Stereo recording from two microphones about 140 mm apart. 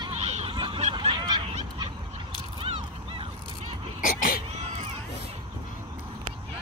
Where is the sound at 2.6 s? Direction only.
40° right (ahead or behind).